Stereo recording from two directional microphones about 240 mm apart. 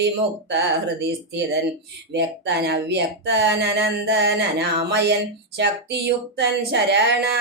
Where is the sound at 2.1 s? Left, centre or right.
Right.